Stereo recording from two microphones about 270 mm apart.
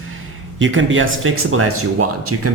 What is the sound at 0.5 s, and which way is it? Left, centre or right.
Speech, right.